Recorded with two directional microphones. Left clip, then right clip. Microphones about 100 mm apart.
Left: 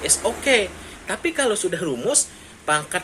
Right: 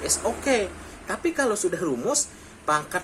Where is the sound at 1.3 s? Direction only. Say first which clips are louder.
Left 3 dB; 40° left (ahead or behind).